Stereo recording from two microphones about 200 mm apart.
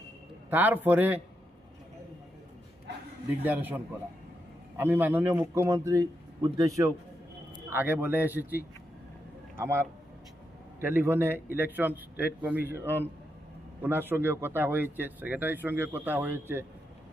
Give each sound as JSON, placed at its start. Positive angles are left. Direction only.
{"t": 0.5, "sound": "speech", "side_deg": -10}
{"t": 3.4, "sound": "a man's voice", "side_deg": -10}